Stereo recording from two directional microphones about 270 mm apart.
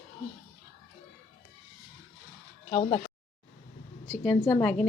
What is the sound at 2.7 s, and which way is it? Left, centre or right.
Speech, centre.